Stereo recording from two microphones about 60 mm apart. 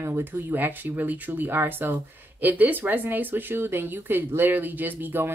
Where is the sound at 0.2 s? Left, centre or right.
Right.